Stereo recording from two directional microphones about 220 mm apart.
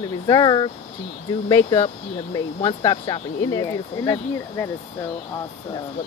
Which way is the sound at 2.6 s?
25° left (ahead or behind).